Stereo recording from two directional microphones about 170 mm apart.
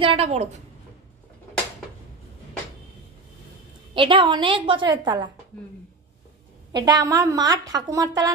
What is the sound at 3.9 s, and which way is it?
A woman's voice, 30° right (ahead or behind).